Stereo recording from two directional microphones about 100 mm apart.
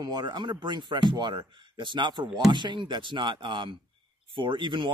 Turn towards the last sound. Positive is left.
turn(degrees=-55)  # may be behind; listen again after turning